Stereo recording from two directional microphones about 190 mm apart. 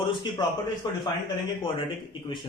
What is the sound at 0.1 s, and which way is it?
Speech, 25° left (ahead or behind).